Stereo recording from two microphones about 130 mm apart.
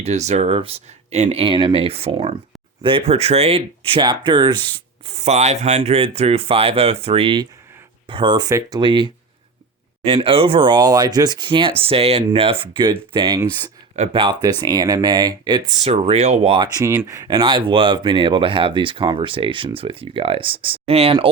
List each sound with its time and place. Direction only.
0.0 s speech: 60° right (ahead or behind); by 5.1 s 35° right (ahead or behind)
5.1 s speech: 55° right (ahead or behind); by 8.4 s 35° right (ahead or behind)
8.4 s speech: 25° right (ahead or behind)
8.8 s speech: 35° right (ahead or behind)
10.2 s speech: 45° right (ahead or behind)
14.4 s speech: 30° right (ahead or behind)
15.7 s speech: 50° right (ahead or behind)
16.8 s speech: 20° right (ahead or behind); by 21.2 s 45° right (ahead or behind)